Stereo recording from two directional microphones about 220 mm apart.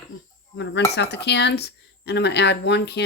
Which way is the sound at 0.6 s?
55° left (ahead or behind).